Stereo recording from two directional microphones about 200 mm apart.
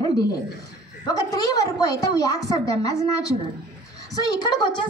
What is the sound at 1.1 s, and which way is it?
A woman's voice, 20° left (ahead or behind).